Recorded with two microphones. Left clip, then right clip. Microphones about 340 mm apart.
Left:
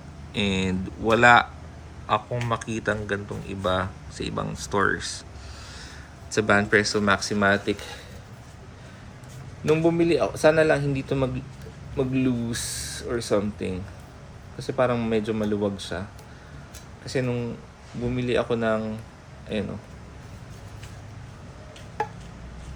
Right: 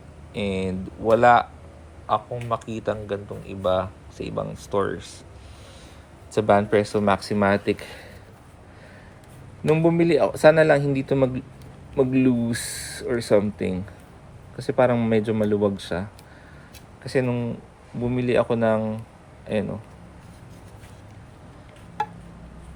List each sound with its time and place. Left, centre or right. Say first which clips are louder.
0.3 s speech: left 1 dB; centre
6.3 s speech: right 1 dB; centre
9.6 s speech: right 1 dB; right
17.1 s speech: right 3 dB; centre